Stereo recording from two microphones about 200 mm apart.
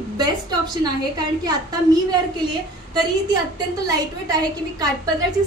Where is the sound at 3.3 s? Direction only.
20° right (ahead or behind).